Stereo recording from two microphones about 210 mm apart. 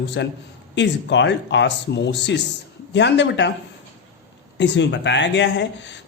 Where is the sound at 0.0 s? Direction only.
55° left (ahead or behind).